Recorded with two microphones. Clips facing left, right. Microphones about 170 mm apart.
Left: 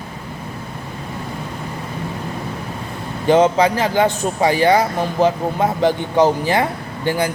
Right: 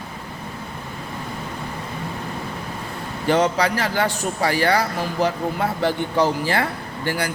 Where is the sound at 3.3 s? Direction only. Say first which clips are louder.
Left 5 dB; 20° left (ahead or behind).